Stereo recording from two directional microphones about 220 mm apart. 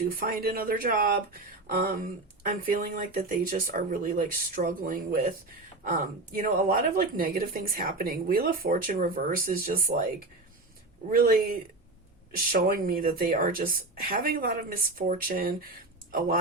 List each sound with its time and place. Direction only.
0.1 s speech: 40° right (ahead or behind)
11.1 s speech: 40° right (ahead or behind)
12.5 s speech: 40° right (ahead or behind)